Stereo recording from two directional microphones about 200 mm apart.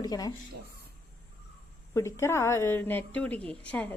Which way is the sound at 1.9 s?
15° left (ahead or behind).